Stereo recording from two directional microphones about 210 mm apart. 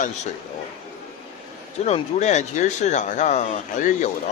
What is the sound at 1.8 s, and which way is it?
A man's voice, 35° left (ahead or behind).